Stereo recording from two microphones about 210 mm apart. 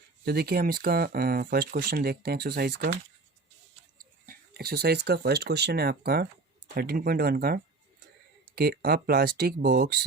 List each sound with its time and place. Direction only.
0.3 s speech: 50° right (ahead or behind)